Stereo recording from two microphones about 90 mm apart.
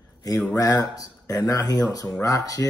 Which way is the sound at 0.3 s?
45° left (ahead or behind).